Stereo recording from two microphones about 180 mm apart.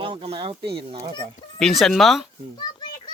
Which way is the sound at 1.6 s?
Centre (ahead or behind).